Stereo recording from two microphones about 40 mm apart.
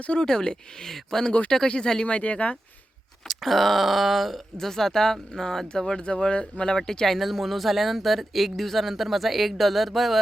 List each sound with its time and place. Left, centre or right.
0.2 s speech: centre
2.1 s speech: left
3.2 s speech: centre